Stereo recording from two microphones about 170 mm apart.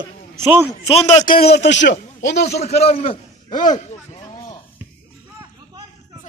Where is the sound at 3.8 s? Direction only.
40° left (ahead or behind).